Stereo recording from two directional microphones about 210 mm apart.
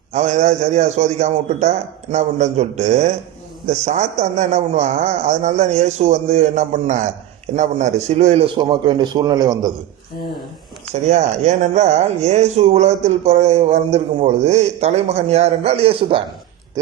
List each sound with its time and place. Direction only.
0.1 s a man's voice: 35° right (ahead or behind); by 9.7 s 15° right (ahead or behind)
10.9 s a man's voice: 35° right (ahead or behind)